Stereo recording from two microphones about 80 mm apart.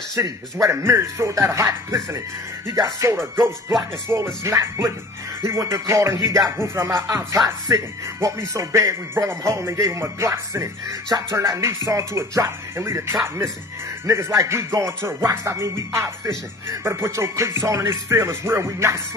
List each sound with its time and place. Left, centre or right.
0.1 s speech: right
2.8 s music: right
3.2 s speech: right